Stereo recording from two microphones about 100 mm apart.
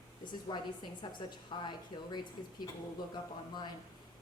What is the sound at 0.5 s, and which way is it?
Speech, 45° left (ahead or behind).